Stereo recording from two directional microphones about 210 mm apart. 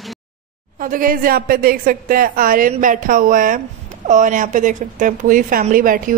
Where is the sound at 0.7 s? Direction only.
40° right (ahead or behind).